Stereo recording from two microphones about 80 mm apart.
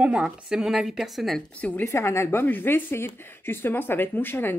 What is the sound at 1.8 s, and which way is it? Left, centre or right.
A woman's voice, left.